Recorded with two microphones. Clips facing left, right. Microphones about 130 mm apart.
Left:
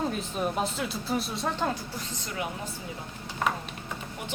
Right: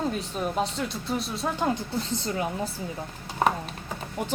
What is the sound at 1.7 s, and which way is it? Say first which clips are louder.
Speech: right 7 dB; 30° right (ahead or behind).